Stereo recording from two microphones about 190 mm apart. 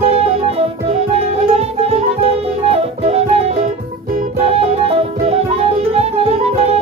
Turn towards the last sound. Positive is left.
turn(degrees=-35)  # may be behind; listen again after turning